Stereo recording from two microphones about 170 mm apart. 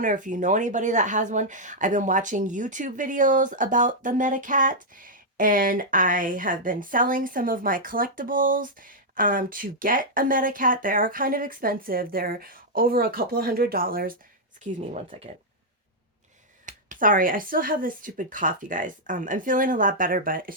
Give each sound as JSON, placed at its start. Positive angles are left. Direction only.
{"t": 0.0, "sound": "speech", "side_deg": -50}
{"t": 14.9, "sound": "speech", "side_deg": -40}
{"t": 16.6, "sound": "speech", "side_deg": -50}